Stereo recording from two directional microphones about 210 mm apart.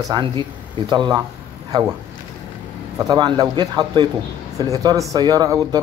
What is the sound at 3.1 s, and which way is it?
Speech, 20° right (ahead or behind).